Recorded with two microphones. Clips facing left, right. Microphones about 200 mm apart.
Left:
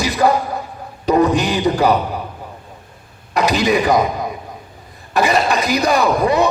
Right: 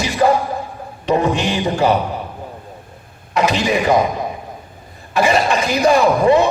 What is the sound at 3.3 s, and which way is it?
Speech, 35° left (ahead or behind).